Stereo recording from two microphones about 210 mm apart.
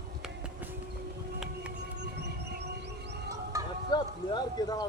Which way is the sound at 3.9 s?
20° left (ahead or behind).